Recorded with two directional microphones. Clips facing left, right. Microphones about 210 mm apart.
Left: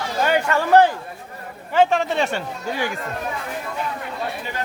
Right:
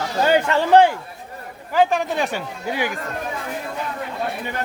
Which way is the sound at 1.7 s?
Centre (ahead or behind).